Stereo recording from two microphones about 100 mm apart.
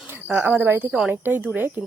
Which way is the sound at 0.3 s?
20° right (ahead or behind).